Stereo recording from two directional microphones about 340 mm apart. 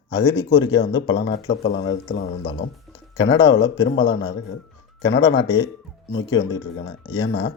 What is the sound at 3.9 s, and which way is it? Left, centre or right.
Speech, centre.